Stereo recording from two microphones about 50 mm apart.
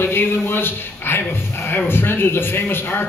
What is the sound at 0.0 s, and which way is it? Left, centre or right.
Speech, left.